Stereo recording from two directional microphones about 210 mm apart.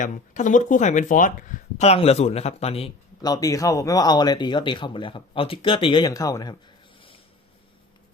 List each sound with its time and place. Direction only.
0.0 s speech: 35° left (ahead or behind); by 6.6 s 20° left (ahead or behind)